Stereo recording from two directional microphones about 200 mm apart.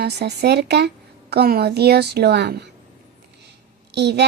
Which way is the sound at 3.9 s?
55° right (ahead or behind).